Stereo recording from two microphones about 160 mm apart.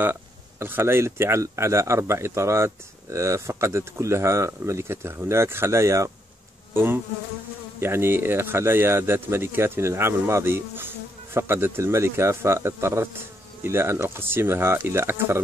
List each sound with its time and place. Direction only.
0.0 s speech: 15° right (ahead or behind)
6.7 s bee: 15° right (ahead or behind)
7.8 s speech: 15° right (ahead or behind)